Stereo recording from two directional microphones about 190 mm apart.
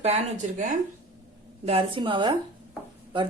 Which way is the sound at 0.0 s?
40° right (ahead or behind).